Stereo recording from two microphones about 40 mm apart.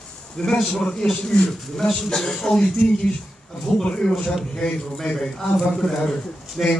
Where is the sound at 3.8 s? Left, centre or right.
Centre.